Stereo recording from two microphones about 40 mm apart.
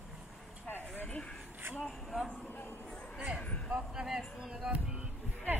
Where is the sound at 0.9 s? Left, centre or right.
Left.